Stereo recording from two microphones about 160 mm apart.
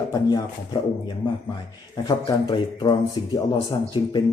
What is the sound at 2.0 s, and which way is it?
Speech, 25° left (ahead or behind).